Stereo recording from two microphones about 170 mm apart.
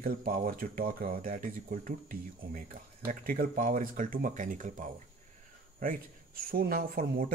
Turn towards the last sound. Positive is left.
turn(degrees=-55)  # may be behind; listen again after turning